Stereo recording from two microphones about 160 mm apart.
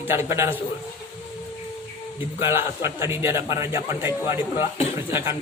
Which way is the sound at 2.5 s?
15° right (ahead or behind).